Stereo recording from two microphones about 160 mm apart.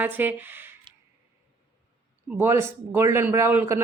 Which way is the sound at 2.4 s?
15° right (ahead or behind).